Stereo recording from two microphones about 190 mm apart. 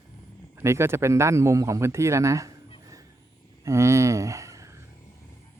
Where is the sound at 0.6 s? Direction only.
15° right (ahead or behind).